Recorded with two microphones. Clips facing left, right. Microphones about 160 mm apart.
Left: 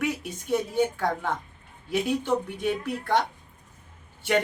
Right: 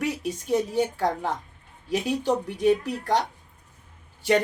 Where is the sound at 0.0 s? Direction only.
35° right (ahead or behind).